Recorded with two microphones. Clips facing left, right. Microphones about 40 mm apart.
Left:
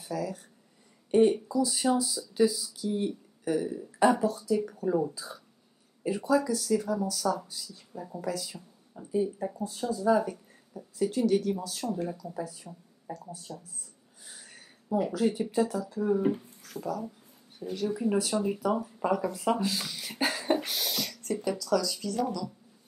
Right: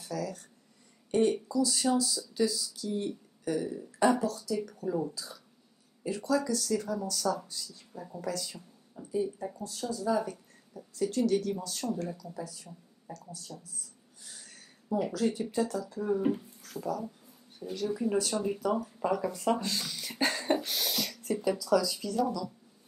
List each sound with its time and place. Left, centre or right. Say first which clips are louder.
0.0 s speech: left 2 dB; centre
12.2 s speech: left 4 dB; left
14.3 s speech: left 2 dB; centre